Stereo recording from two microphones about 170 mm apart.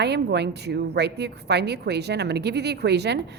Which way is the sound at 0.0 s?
80° right.